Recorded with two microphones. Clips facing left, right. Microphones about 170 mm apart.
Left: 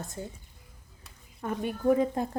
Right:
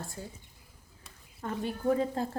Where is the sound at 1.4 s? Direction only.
15° left (ahead or behind).